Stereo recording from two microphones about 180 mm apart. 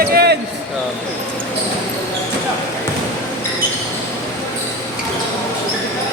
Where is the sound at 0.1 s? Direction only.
60° right (ahead or behind).